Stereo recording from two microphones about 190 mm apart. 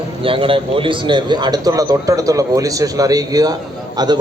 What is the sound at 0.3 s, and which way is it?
A man's voice, 30° right (ahead or behind).